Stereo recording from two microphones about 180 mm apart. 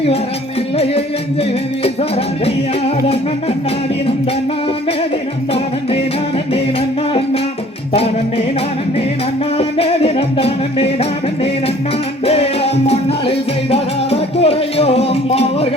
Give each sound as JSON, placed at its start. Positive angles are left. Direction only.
{"t": 0.8, "sound": "music", "side_deg": 35}
{"t": 9.6, "sound": "music", "side_deg": 35}
{"t": 12.2, "sound": "music", "side_deg": 35}